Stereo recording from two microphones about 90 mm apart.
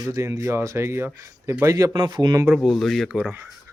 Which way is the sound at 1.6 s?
40° right (ahead or behind).